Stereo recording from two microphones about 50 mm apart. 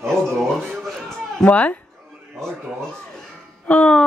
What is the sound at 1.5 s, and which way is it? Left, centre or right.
Speech, left.